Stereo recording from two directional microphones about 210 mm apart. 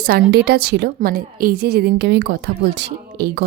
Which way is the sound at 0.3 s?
50° right (ahead or behind).